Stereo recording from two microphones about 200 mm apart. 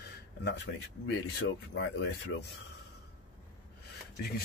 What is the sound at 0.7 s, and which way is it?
Speech, 60° left (ahead or behind).